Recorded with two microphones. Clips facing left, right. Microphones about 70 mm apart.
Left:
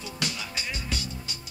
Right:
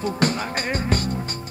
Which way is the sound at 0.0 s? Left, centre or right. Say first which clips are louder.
Right 12 dB; right.